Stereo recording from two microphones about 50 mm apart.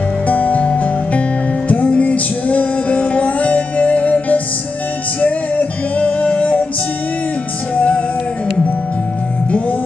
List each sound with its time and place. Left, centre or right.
0.3 s music: left